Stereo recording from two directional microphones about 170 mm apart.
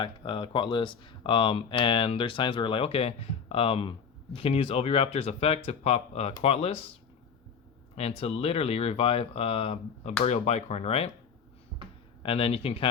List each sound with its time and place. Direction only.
0.0 s speech: 30° left (ahead or behind)
7.9 s speech: 35° left (ahead or behind)
12.2 s speech: 35° left (ahead or behind)